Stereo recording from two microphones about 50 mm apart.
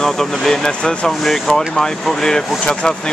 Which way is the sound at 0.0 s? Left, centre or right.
Centre.